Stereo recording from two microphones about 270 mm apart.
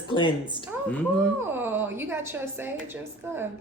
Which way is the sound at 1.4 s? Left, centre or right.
Centre.